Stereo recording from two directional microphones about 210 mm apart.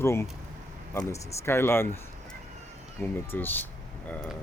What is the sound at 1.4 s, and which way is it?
Speech, 10° left (ahead or behind).